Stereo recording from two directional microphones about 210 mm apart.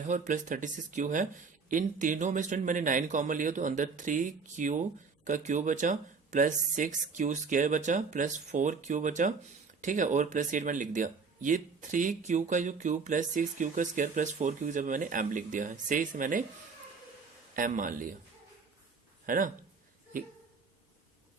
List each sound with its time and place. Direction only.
0.1 s a man's voice: 40° right (ahead or behind)
17.5 s a man's voice: 40° right (ahead or behind)
19.2 s speech: 40° right (ahead or behind)